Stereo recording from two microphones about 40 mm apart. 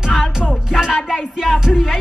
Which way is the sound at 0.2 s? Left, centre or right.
Centre.